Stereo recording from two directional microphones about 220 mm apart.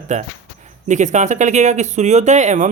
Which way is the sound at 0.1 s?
30° right (ahead or behind).